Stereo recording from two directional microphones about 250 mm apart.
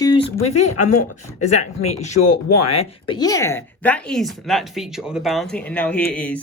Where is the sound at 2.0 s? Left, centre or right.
Left.